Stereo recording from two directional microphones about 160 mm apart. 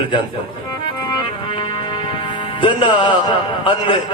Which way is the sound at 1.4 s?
30° left (ahead or behind).